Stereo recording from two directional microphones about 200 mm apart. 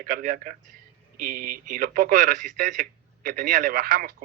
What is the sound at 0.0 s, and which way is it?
Speech, 45° right (ahead or behind).